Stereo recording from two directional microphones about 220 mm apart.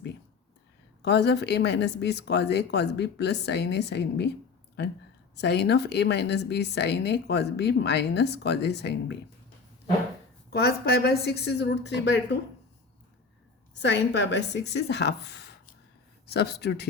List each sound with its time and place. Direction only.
1.0 s a woman's voice: 50° left (ahead or behind)
5.4 s a woman's voice: 50° left (ahead or behind)
10.5 s a woman's voice: 45° left (ahead or behind)
13.7 s a woman's voice: 50° left (ahead or behind)